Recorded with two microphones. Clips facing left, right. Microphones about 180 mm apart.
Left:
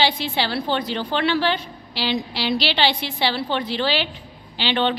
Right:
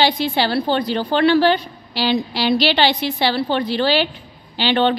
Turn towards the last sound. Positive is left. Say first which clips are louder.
# right 5 dB
turn(degrees=-45)  # may be behind; listen again after turning